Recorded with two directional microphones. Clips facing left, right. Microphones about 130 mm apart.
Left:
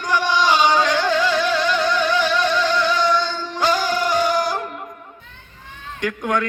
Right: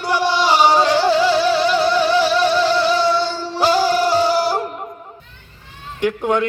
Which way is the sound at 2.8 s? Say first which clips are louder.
Right 3 dB; 10° right (ahead or behind).